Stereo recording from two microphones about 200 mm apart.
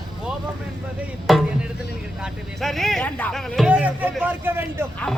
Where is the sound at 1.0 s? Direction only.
5° right (ahead or behind).